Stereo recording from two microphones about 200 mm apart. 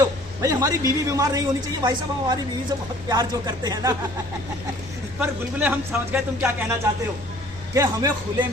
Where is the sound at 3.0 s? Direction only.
20° right (ahead or behind).